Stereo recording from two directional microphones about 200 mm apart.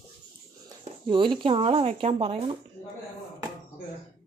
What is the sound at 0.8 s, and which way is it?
Speech, 25° right (ahead or behind).